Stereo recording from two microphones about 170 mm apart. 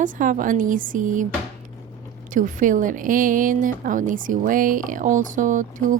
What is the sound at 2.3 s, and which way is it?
A woman's voice, 50° right (ahead or behind).